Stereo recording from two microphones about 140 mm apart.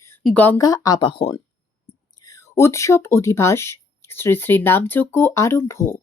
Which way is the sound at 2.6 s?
20° left (ahead or behind).